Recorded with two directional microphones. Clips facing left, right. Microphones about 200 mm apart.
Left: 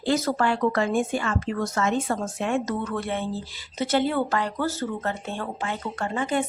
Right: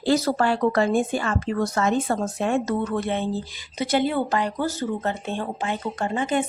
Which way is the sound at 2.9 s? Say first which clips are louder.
Right 3 dB; 20° right (ahead or behind).